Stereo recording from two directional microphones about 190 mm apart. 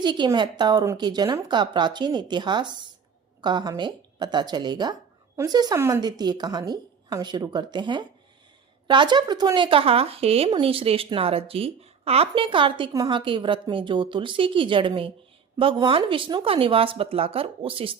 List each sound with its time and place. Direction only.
0.0 s speech: 25° right (ahead or behind)